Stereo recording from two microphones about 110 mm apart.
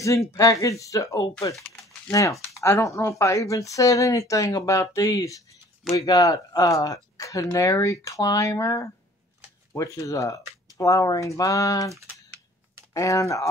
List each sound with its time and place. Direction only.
0.0 s speech: 30° left (ahead or behind)
2.6 s speech: 25° left (ahead or behind)
12.9 s speech: 30° left (ahead or behind)